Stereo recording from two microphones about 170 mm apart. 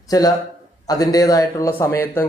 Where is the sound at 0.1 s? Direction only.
20° left (ahead or behind).